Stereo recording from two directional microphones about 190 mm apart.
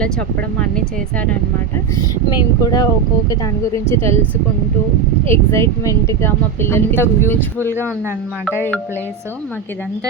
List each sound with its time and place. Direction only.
0.0 s speech: 5° left (ahead or behind)
2.0 s a woman's voice: 20° left (ahead or behind)
5.3 s a woman's voice: 15° left (ahead or behind)